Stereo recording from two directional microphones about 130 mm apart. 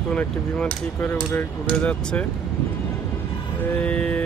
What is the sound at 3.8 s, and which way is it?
Speech, 10° left (ahead or behind).